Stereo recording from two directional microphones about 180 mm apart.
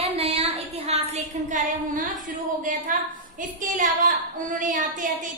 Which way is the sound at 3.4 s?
45° right (ahead or behind).